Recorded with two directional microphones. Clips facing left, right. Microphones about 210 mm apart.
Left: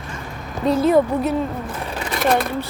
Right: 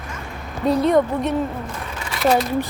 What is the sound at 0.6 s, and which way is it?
Speech, centre (ahead or behind).